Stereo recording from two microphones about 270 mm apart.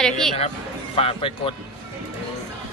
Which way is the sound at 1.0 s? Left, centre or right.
Left.